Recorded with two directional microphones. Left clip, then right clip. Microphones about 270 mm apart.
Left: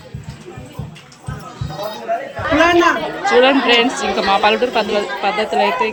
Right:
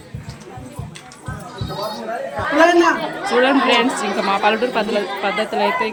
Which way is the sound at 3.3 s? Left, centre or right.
Centre.